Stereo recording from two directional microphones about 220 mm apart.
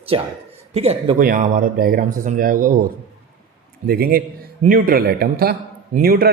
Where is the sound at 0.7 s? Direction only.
30° right (ahead or behind).